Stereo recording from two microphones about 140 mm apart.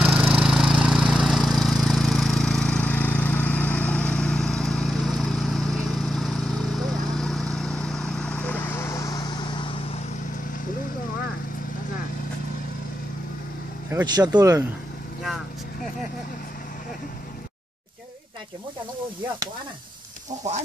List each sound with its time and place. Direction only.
0.0 s a sound: 5° right (ahead or behind); by 9.9 s 35° left (ahead or behind)
14.1 s speech: 30° right (ahead or behind)
15.2 s vehicle: centre (ahead or behind)